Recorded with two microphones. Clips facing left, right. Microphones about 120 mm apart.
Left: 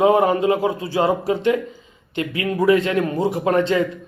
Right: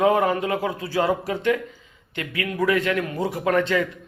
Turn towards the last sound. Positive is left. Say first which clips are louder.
# left 3 dB
turn(degrees=25)  # may be behind; listen again after turning